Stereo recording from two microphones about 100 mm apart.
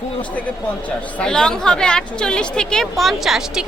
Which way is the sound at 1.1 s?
5° left (ahead or behind).